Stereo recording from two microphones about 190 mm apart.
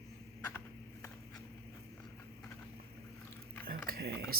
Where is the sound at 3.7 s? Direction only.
50° right (ahead or behind).